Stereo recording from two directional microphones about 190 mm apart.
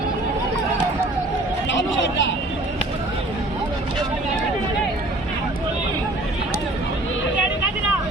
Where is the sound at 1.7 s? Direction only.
75° left (ahead or behind).